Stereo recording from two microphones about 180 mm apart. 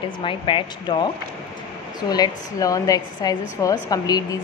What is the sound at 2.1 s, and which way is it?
A woman's voice, 20° left (ahead or behind).